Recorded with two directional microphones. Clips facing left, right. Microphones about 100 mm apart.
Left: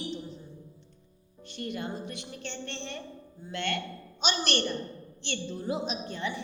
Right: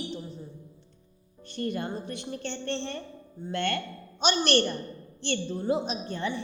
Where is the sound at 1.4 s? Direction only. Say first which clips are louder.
Right 4 dB; 40° right (ahead or behind).